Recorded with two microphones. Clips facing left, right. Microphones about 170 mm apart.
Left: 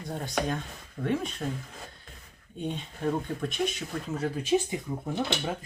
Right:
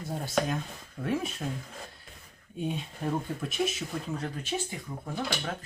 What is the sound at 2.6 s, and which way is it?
Speech, 5° right (ahead or behind).